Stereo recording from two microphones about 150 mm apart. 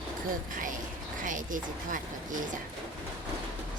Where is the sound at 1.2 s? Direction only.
60° right (ahead or behind).